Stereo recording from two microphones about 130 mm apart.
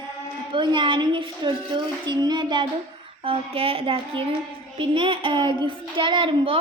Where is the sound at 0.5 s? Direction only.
40° right (ahead or behind).